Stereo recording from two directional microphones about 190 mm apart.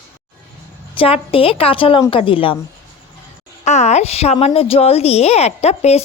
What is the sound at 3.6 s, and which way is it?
A woman's voice, 35° left (ahead or behind).